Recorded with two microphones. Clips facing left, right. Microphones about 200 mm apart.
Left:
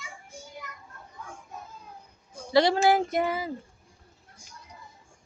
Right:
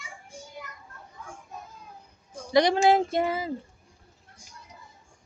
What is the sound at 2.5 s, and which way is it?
Speech, 20° right (ahead or behind).